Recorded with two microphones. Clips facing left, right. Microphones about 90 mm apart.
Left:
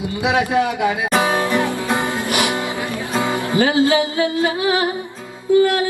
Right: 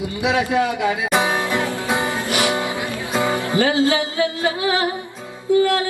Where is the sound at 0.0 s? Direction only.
20° left (ahead or behind).